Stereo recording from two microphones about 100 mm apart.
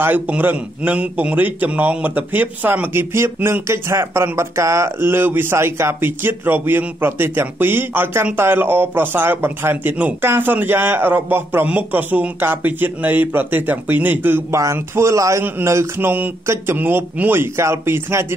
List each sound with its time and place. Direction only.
0.0 s a man's voice: 20° right (ahead or behind)